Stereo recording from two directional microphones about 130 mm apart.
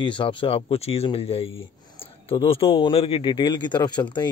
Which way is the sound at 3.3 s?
35° left (ahead or behind).